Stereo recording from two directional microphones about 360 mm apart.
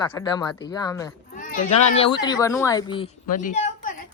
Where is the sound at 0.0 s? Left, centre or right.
Centre.